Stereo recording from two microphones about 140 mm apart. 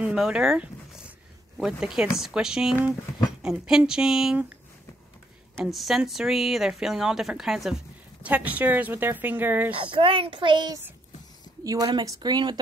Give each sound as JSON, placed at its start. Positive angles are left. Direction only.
{"t": 0.0, "sound": "a sound", "side_deg": -5}
{"t": 1.6, "sound": "speech", "side_deg": -5}
{"t": 5.7, "sound": "speech", "side_deg": 0}
{"t": 9.8, "sound": "a child's voice", "side_deg": -40}